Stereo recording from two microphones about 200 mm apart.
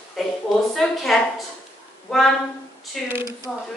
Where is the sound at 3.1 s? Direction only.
15° right (ahead or behind).